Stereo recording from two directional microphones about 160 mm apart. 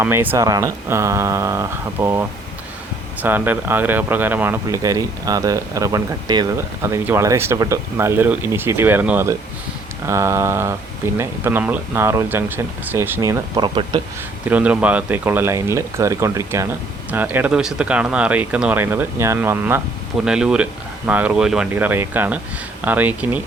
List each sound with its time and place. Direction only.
0.0 s speech: 10° right (ahead or behind)
6.6 s speech: 15° right (ahead or behind)
13.6 s speech: 30° right (ahead or behind)
14.4 s speech: 10° right (ahead or behind)